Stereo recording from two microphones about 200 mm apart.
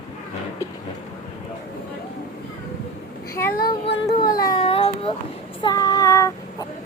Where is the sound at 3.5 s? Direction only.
50° left (ahead or behind).